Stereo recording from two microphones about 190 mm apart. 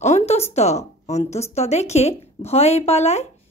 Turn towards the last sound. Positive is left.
turn(degrees=35)  # may be behind; listen again after turning